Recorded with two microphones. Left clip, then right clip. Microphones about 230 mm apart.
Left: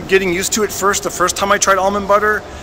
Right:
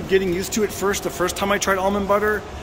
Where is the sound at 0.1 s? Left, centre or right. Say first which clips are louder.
Left 6 dB; centre.